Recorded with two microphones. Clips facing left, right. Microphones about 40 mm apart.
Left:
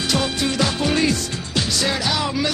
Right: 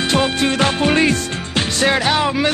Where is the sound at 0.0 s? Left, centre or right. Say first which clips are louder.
Right 5 dB; right.